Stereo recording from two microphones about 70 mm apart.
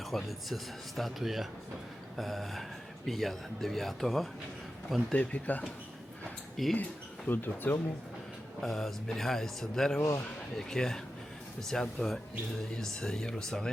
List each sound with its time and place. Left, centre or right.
0.0 s speech: centre
5.1 s speech: centre
6.6 s speech: centre
7.3 s speech: left
8.6 s speech: centre